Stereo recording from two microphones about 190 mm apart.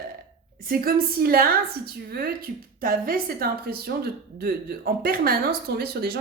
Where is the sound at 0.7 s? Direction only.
50° right (ahead or behind).